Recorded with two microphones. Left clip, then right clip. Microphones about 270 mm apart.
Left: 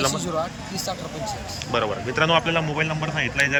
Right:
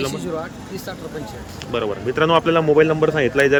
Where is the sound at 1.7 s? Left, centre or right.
Centre.